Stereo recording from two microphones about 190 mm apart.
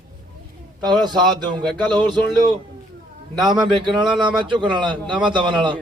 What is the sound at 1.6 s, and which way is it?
Speech, 5° left (ahead or behind).